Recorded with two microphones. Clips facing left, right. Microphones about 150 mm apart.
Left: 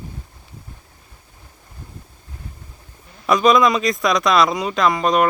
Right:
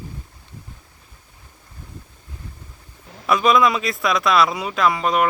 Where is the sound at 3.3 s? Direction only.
5° right (ahead or behind).